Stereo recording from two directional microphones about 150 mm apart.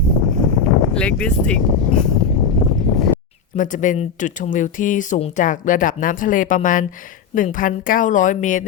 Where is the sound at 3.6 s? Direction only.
60° left (ahead or behind).